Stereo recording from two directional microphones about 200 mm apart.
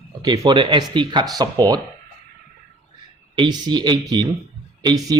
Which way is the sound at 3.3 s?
20° right (ahead or behind).